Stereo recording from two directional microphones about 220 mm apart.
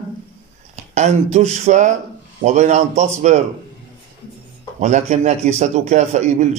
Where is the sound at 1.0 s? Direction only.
30° right (ahead or behind).